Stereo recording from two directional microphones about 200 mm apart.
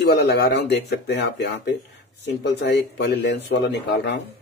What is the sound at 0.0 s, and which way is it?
Speech, 60° left (ahead or behind).